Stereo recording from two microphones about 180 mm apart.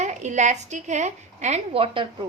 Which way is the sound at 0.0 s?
40° right (ahead or behind).